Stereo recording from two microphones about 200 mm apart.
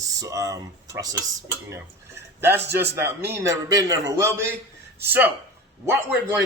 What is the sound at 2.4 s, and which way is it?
A man's voice, 10° right (ahead or behind).